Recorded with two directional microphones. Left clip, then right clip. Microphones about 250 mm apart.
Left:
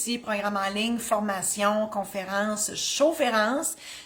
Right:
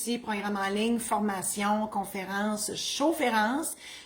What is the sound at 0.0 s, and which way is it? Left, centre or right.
A woman's voice, centre.